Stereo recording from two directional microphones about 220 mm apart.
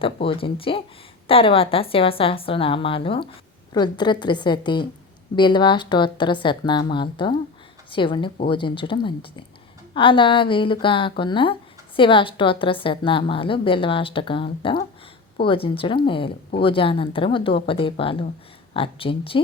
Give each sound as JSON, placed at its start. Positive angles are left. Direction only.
{"t": 0.0, "sound": "a woman's voice", "side_deg": 25}